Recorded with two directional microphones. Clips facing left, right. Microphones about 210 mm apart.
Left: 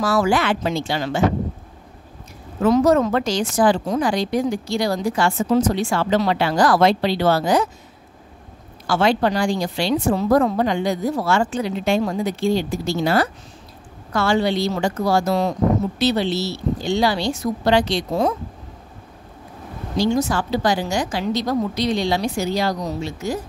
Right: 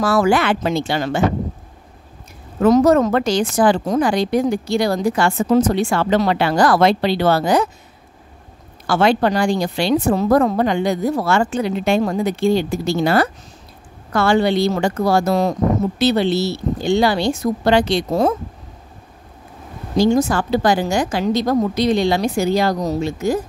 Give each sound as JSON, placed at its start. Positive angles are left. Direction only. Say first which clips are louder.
{"t": 0.0, "sound": "a woman's voice", "louder": "right 3 dB", "side_deg": -55}
{"t": 2.6, "sound": "a woman's voice", "louder": "right 3 dB", "side_deg": -50}
{"t": 8.8, "sound": "a woman's voice", "louder": "right 2 dB", "side_deg": -55}
{"t": 20.0, "sound": "a woman's voice", "louder": "right 4 dB", "side_deg": -50}